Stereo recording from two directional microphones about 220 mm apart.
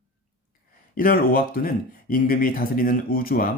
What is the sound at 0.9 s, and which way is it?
Speech, 40° left (ahead or behind).